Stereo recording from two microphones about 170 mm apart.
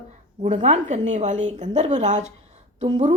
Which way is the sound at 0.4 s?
45° right (ahead or behind).